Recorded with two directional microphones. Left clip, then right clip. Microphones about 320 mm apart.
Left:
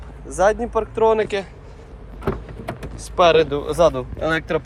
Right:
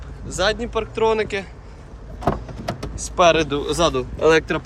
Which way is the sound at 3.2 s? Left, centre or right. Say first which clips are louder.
Left 1 dB; centre.